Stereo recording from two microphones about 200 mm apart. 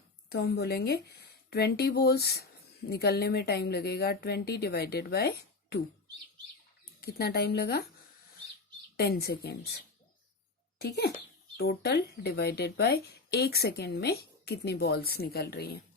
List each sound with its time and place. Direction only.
0.3 s speech: 55° left (ahead or behind)
7.0 s speech: 50° left (ahead or behind)
9.0 s a child's voice: 50° left (ahead or behind)